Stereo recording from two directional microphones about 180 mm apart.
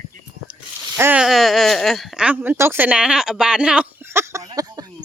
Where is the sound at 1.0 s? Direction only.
10° right (ahead or behind).